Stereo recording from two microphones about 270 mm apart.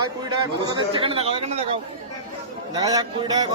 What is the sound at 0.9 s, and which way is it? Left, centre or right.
A man's voice, centre.